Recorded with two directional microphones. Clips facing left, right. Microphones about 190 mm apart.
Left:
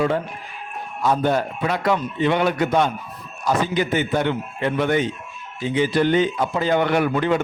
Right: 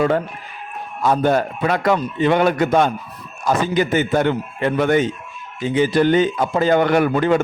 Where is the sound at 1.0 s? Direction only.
50° right (ahead or behind).